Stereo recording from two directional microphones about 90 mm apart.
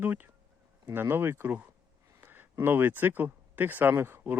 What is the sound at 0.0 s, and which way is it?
Speech, 20° right (ahead or behind).